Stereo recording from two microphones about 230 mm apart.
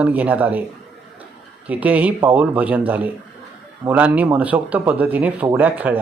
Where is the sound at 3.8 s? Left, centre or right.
Centre.